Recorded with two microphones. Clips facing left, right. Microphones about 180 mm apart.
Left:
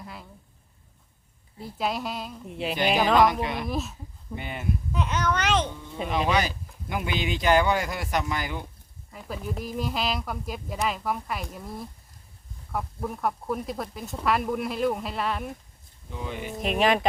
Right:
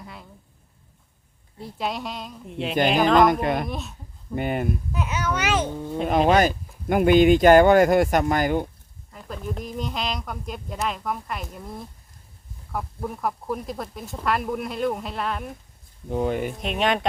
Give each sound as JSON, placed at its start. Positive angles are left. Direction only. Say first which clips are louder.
{"t": 0.0, "sound": "a woman's voice", "louder": "even", "side_deg": 0}
{"t": 1.5, "sound": "speech", "louder": "even", "side_deg": 0}
{"t": 3.4, "sound": "speech", "louder": "right 6 dB", "side_deg": -50}
{"t": 3.7, "sound": "speech", "louder": "left 2 dB", "side_deg": 0}
{"t": 4.4, "sound": "speech", "louder": "right 9 dB", "side_deg": -50}
{"t": 4.9, "sound": "a child's voice", "louder": "even", "side_deg": -5}
{"t": 5.6, "sound": "speech", "louder": "right 7 dB", "side_deg": -45}
{"t": 9.1, "sound": "speech", "louder": "right 1 dB", "side_deg": 5}
{"t": 16.0, "sound": "speech", "louder": "right 11 dB", "side_deg": -50}
{"t": 16.6, "sound": "speech", "louder": "left 1 dB", "side_deg": 0}